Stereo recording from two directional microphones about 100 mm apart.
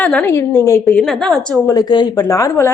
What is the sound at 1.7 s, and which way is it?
Speech, 45° left (ahead or behind).